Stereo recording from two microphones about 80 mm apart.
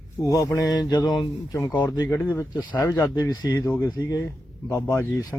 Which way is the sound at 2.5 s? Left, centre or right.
Left.